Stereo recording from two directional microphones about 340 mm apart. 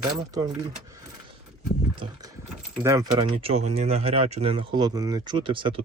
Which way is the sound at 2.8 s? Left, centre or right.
Centre.